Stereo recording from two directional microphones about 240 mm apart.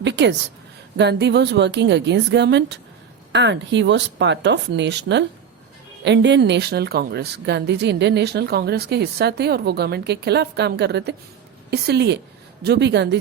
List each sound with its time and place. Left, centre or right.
0.0 s a woman's voice: right